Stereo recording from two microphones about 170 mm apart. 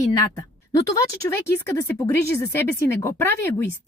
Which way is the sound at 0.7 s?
15° left (ahead or behind).